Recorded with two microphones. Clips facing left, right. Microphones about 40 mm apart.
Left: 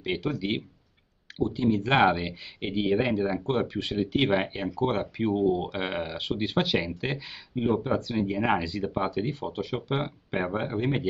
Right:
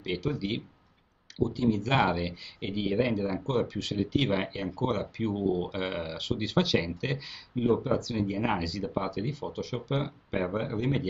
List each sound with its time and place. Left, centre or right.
0.0 s speech: left